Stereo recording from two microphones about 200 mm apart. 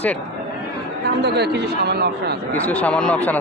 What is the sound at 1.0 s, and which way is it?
A man's voice, 55° right (ahead or behind).